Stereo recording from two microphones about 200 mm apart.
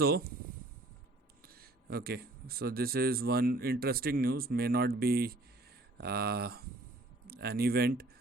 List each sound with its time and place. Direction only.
0.0 s speech: 50° right (ahead or behind)
1.5 s speech: 50° right (ahead or behind)